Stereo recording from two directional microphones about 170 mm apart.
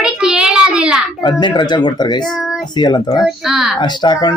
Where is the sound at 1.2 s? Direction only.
25° left (ahead or behind).